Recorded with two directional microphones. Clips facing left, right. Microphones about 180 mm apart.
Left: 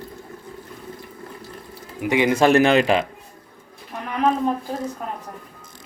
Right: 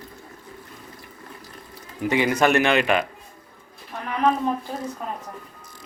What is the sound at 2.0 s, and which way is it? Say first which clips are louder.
Speech: left 3 dB; 15° left (ahead or behind).